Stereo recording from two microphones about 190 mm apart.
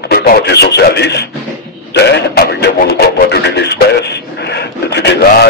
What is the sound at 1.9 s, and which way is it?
Music, 60° left (ahead or behind).